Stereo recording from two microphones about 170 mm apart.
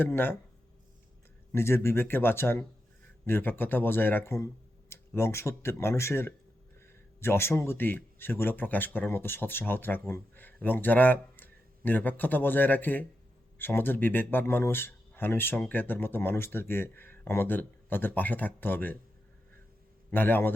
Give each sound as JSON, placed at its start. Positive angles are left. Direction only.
{"t": 0.0, "sound": "speech", "side_deg": 10}
{"t": 1.5, "sound": "speech", "side_deg": 15}
{"t": 20.1, "sound": "a man's voice", "side_deg": 10}